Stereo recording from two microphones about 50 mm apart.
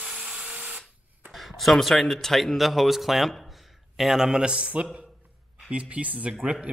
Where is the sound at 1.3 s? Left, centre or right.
Centre.